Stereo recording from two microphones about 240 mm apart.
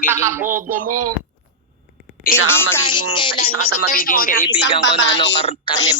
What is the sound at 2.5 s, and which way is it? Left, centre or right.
Speech, centre.